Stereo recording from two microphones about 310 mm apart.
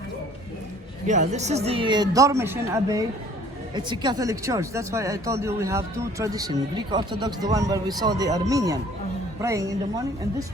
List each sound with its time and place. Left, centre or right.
1.0 s speech: right